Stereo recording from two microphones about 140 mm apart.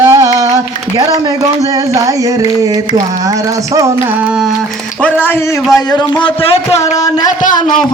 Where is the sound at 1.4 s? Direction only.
25° right (ahead or behind).